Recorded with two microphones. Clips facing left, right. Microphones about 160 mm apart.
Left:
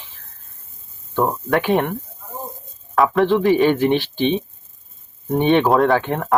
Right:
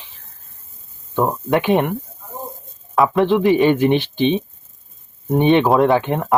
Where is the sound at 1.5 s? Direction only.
20° right (ahead or behind).